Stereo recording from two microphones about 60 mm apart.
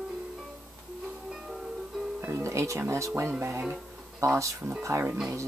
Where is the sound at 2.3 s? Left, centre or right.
Right.